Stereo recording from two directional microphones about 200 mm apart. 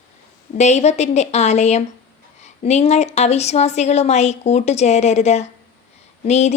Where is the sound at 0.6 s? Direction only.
35° left (ahead or behind).